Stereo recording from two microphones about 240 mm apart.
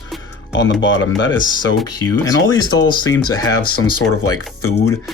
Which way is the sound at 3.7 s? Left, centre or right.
Left.